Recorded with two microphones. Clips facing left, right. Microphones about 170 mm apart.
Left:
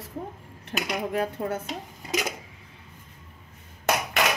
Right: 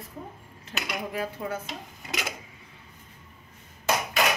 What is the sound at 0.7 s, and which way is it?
Speech, 50° left (ahead or behind).